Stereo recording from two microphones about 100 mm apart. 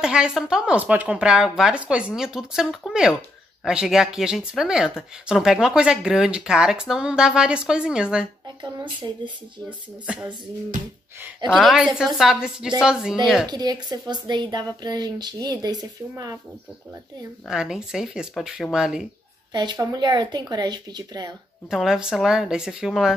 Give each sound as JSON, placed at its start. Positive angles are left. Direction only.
{"t": 0.0, "sound": "speech", "side_deg": -10}
{"t": 9.7, "sound": "speech", "side_deg": -10}
{"t": 11.7, "sound": "speech", "side_deg": -5}
{"t": 13.5, "sound": "a woman's voice", "side_deg": -45}
{"t": 17.5, "sound": "speech", "side_deg": -5}
{"t": 19.5, "sound": "a woman's voice", "side_deg": -45}
{"t": 21.6, "sound": "speech", "side_deg": -5}